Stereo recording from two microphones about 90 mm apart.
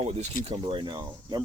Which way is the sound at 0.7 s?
65° right (ahead or behind).